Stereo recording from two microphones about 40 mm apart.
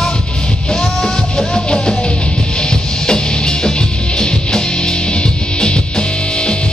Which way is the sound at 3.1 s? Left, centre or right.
Centre.